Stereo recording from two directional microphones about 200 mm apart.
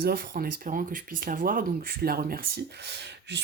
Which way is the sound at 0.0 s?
45° right (ahead or behind).